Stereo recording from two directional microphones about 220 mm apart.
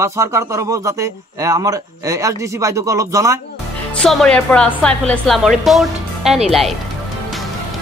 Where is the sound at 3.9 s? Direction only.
5° left (ahead or behind).